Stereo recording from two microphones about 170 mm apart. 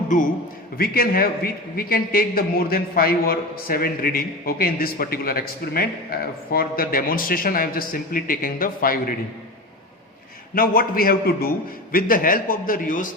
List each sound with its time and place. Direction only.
0.8 s a man's voice: 60° left (ahead or behind)
10.5 s a man's voice: 60° left (ahead or behind)